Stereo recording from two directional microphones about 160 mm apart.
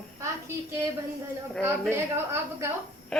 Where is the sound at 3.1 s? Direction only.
5° left (ahead or behind).